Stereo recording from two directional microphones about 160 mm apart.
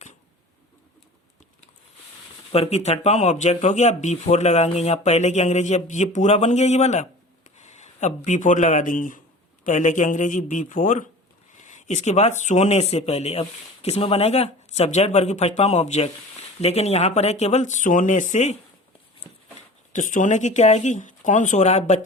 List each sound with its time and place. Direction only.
2.5 s speech: 40° left (ahead or behind)
19.9 s speech: 55° left (ahead or behind)